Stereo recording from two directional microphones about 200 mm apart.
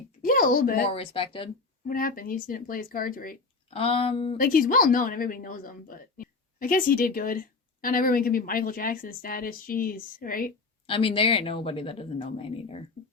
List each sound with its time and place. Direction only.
0.2 s a sound: 45° left (ahead or behind)
0.9 s speech: 30° left (ahead or behind)
1.9 s speech: 45° left (ahead or behind)
3.7 s speech: 30° left (ahead or behind)
4.4 s speech: 45° left (ahead or behind)
10.8 s speech: 25° left (ahead or behind)